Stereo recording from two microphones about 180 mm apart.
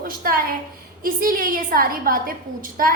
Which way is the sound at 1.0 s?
50° right (ahead or behind).